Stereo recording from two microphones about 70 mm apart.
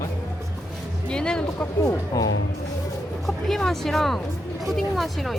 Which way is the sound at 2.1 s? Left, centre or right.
Left.